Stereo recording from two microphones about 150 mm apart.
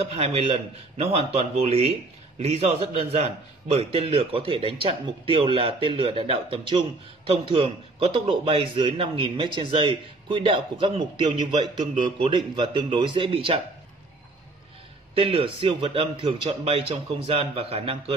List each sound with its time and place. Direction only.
0.0 s a man's voice: 45° right (ahead or behind)
15.1 s a man's voice: 40° right (ahead or behind)